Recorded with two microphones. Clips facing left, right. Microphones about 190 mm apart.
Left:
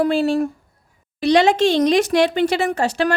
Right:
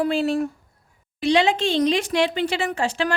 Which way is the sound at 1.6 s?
75° left (ahead or behind).